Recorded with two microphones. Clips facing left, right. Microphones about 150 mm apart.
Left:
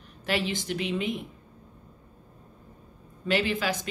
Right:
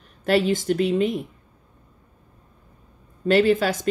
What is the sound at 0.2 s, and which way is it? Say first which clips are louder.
A woman's voice: right 9 dB; 45° right (ahead or behind).